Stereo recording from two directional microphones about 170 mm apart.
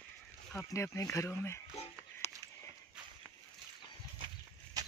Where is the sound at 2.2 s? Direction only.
40° left (ahead or behind).